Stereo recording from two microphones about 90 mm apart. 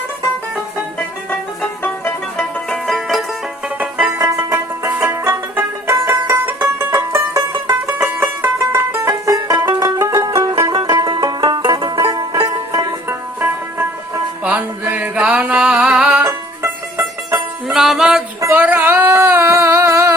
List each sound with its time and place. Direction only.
1.8 s music: 20° left (ahead or behind)
2.6 s music: 5° left (ahead or behind)
3.8 s music: 15° right (ahead or behind)
4.2 s music: 35° right (ahead or behind)
7.9 s music: 20° right (ahead or behind)
9.3 s music: 45° right (ahead or behind)
10.4 s music: 45° right (ahead or behind)
13.1 s music: 25° right (ahead or behind)
16.2 s music: 30° right (ahead or behind)
17.7 s music: 5° right (ahead or behind)
18.5 s a sound: 20° right (ahead or behind)